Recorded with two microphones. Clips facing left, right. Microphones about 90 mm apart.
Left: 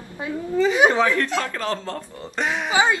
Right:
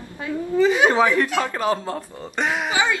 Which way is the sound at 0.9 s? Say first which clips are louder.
Right 2 dB; 15° right (ahead or behind).